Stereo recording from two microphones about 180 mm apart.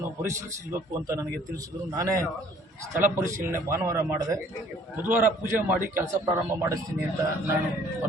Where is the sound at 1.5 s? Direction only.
20° right (ahead or behind).